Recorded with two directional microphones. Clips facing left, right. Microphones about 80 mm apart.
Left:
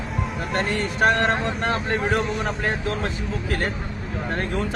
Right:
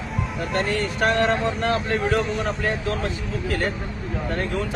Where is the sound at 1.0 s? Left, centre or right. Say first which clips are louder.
Left 1 dB; left.